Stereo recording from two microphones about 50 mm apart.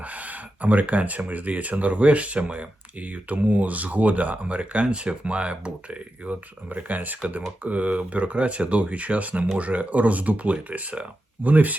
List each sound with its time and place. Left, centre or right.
0.0 s a sound: right
1.3 s speech: right
6.7 s speech: right